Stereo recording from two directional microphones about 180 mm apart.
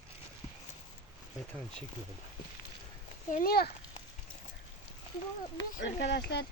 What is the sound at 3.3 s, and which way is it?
Speech, 55° left (ahead or behind).